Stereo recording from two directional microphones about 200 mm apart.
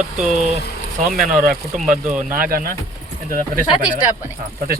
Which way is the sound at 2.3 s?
45° right (ahead or behind).